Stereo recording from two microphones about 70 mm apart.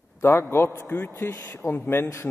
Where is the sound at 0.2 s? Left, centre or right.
Left.